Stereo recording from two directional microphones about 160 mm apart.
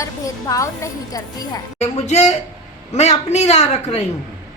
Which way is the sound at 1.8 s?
45° left (ahead or behind).